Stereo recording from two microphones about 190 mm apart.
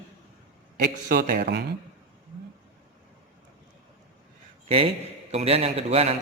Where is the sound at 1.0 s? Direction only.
45° right (ahead or behind).